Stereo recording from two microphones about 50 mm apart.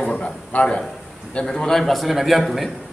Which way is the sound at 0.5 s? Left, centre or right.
Left.